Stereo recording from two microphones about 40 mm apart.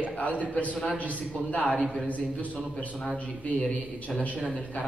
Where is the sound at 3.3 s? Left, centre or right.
Left.